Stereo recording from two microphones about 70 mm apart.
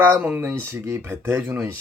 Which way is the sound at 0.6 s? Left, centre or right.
Right.